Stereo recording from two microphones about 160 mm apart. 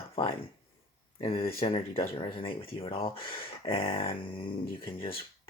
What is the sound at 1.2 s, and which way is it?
Speech, 35° left (ahead or behind).